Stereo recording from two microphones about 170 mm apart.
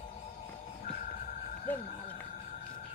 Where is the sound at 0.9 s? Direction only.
50° left (ahead or behind).